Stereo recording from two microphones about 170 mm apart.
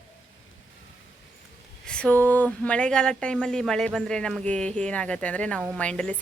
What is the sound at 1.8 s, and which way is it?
Speech, 5° left (ahead or behind).